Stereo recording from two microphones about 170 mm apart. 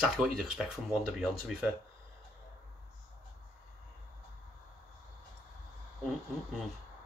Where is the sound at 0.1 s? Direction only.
Centre (ahead or behind).